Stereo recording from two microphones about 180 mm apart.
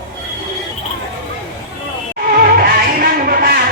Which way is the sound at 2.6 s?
55° right (ahead or behind).